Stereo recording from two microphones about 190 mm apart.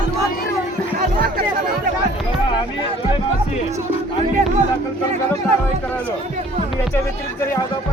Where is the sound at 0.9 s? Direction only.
50° right (ahead or behind).